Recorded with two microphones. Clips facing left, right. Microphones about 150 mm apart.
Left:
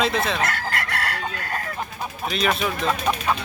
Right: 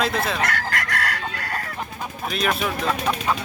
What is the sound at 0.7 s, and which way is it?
Chicken, 40° right (ahead or behind).